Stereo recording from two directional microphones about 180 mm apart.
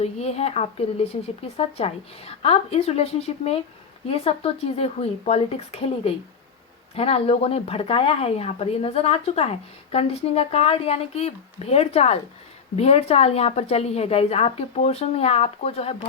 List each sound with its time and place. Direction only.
0.0 s a woman's voice: 35° left (ahead or behind)